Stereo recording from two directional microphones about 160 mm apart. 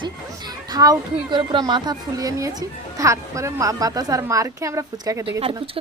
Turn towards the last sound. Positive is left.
turn(degrees=-20)  # may be behind; listen again after turning